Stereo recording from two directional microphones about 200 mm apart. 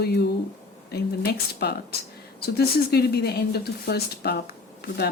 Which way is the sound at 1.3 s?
55° left (ahead or behind).